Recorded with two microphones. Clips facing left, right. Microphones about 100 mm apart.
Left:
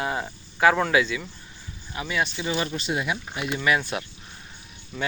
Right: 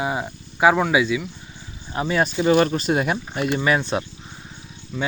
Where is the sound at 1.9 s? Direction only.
35° right (ahead or behind).